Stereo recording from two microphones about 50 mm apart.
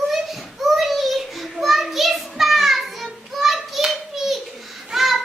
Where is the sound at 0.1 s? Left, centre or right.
Centre.